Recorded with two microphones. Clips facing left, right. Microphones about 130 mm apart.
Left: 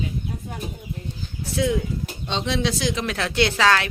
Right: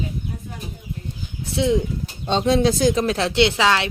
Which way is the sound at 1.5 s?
25° right (ahead or behind).